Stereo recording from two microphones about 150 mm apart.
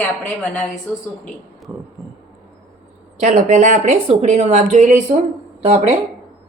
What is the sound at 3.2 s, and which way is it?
Speech, 55° right (ahead or behind).